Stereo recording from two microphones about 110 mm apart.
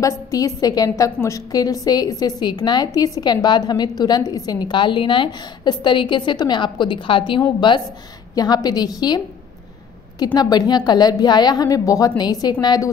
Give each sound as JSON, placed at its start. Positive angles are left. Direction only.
{"t": 0.0, "sound": "a woman's voice", "side_deg": 35}
{"t": 8.4, "sound": "a woman's voice", "side_deg": 35}